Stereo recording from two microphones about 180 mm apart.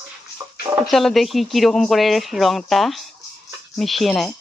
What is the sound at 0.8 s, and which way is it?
Speech, centre (ahead or behind).